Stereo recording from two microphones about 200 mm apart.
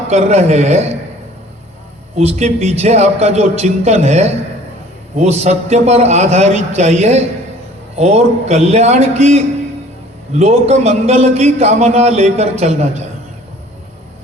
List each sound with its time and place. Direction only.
0.1 s a man's voice: 35° right (ahead or behind)
2.1 s a man's voice: 30° right (ahead or behind)